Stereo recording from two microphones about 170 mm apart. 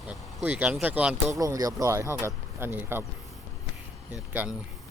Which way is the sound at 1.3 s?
20° right (ahead or behind).